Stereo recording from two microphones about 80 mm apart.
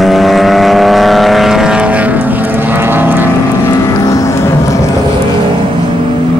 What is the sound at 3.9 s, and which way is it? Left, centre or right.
Music, left.